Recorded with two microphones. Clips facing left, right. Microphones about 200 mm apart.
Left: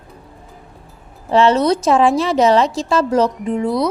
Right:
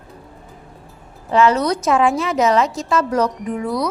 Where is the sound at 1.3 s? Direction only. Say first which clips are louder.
Left 2 dB; 30° left (ahead or behind).